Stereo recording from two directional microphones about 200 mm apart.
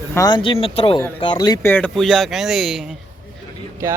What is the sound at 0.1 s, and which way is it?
Speech, 20° left (ahead or behind).